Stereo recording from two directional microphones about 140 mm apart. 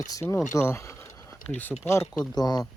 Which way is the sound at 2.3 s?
30° left (ahead or behind).